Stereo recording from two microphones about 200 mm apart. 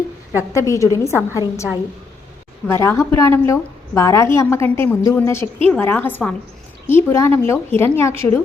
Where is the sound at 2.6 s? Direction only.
10° left (ahead or behind).